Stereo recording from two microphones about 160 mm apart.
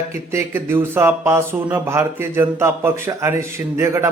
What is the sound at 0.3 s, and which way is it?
Speech, 15° right (ahead or behind).